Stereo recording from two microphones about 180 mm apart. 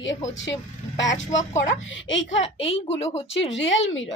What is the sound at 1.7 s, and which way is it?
Speech, 90° left.